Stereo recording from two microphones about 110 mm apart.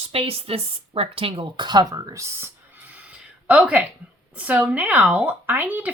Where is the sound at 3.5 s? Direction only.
10° right (ahead or behind).